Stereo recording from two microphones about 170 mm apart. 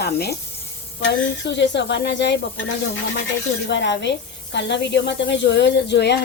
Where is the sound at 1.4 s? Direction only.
90° left.